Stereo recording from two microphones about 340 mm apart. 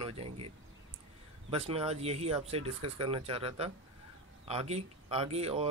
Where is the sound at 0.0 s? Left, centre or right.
Centre.